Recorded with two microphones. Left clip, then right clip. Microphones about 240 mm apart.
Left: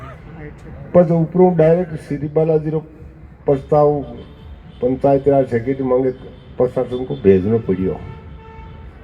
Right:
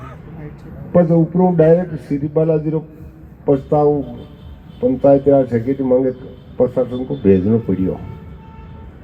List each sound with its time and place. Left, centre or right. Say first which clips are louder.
0.9 s speech: left 1 dB; left
5.0 s speech: right 3 dB; left